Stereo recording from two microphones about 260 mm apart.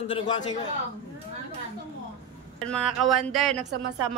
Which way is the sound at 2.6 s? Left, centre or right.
Centre.